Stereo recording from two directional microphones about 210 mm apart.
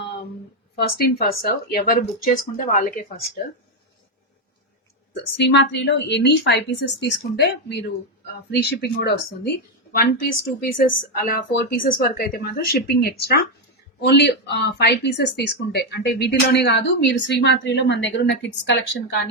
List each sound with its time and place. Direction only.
0.8 s a woman's voice: 45° left (ahead or behind)
5.4 s a woman's voice: 55° left (ahead or behind)